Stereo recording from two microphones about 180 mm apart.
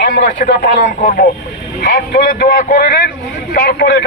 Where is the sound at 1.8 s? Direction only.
55° left (ahead or behind).